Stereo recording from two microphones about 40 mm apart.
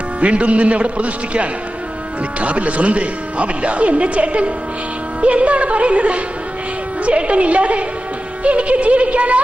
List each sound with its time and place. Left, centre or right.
0.2 s speech: right